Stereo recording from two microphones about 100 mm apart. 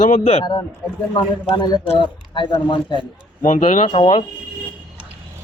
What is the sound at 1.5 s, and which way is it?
Speech, 50° left (ahead or behind).